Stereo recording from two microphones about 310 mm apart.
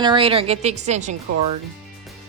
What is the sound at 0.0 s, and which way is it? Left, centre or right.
A woman's voice, centre.